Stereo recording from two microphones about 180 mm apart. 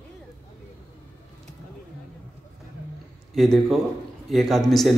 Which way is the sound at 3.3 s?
Centre (ahead or behind).